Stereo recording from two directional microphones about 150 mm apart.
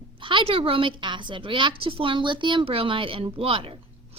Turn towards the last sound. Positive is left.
turn(degrees=-40)  # may be behind; listen again after turning